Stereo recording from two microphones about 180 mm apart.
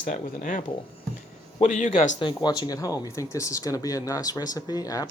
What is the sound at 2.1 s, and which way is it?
Speech, 25° left (ahead or behind).